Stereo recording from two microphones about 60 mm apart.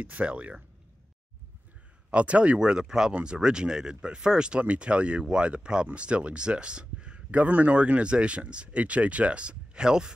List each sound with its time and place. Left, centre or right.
0.0 s speech: right
2.0 s speech: right